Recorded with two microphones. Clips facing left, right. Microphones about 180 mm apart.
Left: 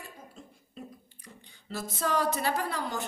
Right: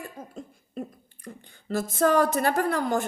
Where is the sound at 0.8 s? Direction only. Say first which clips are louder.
Right 9 dB; 50° right (ahead or behind).